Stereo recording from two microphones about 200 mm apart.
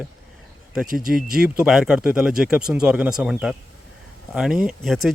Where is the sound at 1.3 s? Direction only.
Centre (ahead or behind).